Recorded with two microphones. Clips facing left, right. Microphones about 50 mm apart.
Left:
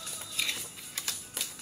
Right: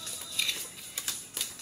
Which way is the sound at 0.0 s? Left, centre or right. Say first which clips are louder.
Even; centre.